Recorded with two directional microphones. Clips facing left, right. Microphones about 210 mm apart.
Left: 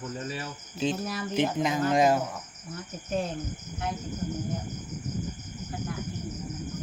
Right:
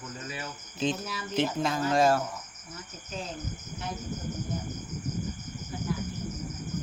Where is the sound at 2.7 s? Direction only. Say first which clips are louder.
Left 8 dB; 55° left (ahead or behind).